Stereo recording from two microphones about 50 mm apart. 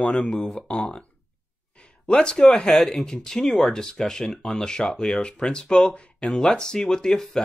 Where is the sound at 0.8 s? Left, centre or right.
Centre.